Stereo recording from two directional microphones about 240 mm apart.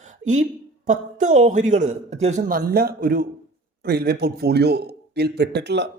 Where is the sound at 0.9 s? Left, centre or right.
Right.